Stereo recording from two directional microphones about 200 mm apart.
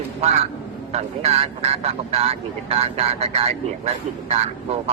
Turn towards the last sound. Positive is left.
turn(degrees=-30)  # may be behind; listen again after turning